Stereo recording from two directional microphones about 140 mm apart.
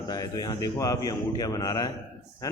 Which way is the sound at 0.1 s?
30° left (ahead or behind).